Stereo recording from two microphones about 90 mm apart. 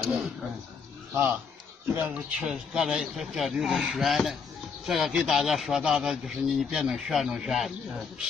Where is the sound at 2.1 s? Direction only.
5° right (ahead or behind).